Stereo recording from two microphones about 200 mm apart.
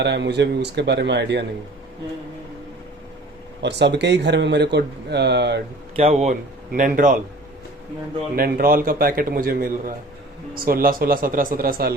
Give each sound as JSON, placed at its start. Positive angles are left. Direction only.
{"t": 0.0, "sound": "speech", "side_deg": -60}
{"t": 3.6, "sound": "speech", "side_deg": -60}
{"t": 6.0, "sound": "a man's voice", "side_deg": -30}
{"t": 8.4, "sound": "a man's voice", "side_deg": -45}